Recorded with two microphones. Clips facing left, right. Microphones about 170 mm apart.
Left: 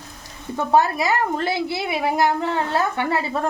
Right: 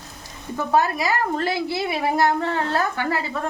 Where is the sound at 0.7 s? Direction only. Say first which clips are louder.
Left 2 dB; 25° left (ahead or behind).